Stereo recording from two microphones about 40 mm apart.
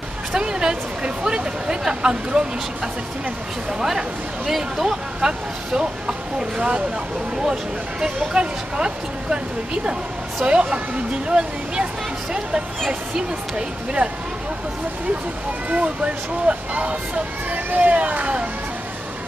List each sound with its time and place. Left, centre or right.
0.3 s a sound: centre
4.5 s speech: centre
8.0 s speech: right
10.4 s speech: right
14.0 s speech: right
15.7 s speech: right